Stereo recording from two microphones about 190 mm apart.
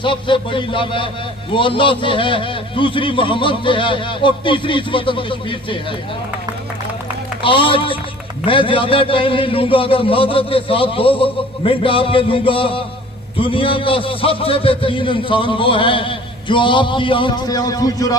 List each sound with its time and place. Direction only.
0.0 s a man's voice: 25° left (ahead or behind)
7.4 s a man's voice: 25° left (ahead or behind)